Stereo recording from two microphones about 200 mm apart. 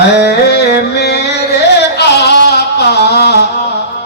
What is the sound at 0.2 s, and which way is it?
Music, 55° left (ahead or behind).